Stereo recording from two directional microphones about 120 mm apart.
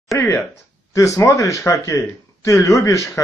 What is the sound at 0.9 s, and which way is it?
Speech, 25° left (ahead or behind).